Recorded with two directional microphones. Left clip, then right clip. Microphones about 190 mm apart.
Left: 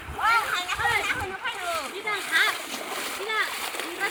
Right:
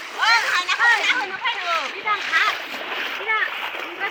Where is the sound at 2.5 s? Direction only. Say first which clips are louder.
Right 5 dB; 60° left (ahead or behind).